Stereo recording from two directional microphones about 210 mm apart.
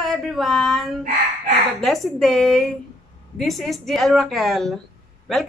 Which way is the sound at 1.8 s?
Centre (ahead or behind).